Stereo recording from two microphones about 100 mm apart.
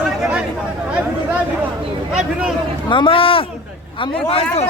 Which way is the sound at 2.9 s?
60° left (ahead or behind).